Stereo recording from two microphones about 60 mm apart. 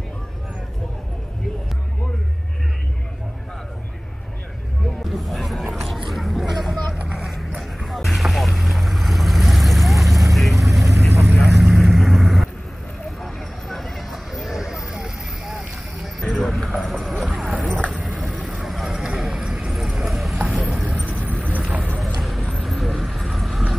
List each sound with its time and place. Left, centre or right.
5.0 s a sound: centre
10.3 s vehicle: centre
16.0 s clip-clop: centre
17.4 s horse: centre
18.0 s vehicle: centre
18.6 s a sound: centre
20.6 s vehicle: centre
21.2 s clip-clop: right
22.2 s vehicle: centre